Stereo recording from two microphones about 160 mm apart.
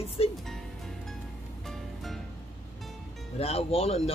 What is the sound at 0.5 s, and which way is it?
Music, centre (ahead or behind).